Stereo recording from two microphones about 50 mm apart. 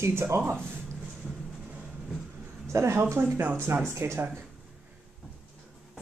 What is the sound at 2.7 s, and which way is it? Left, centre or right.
Speech, right.